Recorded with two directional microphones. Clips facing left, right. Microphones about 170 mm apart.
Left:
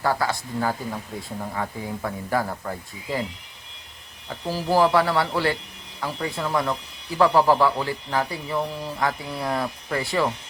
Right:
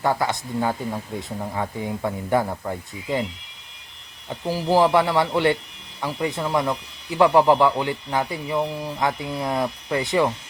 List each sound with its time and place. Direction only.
0.0 s a man's voice: 20° right (ahead or behind)
4.3 s a man's voice: 15° right (ahead or behind)